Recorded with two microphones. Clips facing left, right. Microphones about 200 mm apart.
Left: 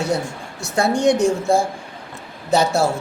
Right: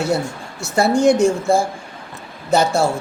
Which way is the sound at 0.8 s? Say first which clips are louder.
Right 3 dB; centre (ahead or behind).